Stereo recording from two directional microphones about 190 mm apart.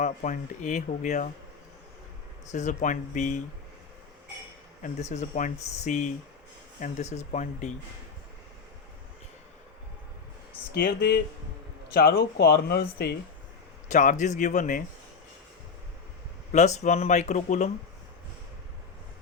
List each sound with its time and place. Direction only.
0.0 s speech: 40° left (ahead or behind)
2.5 s speech: 40° left (ahead or behind)
4.8 s speech: 35° left (ahead or behind)
10.8 s speech: 60° left (ahead or behind)
13.8 s speech: 40° left (ahead or behind)
16.5 s speech: 40° left (ahead or behind)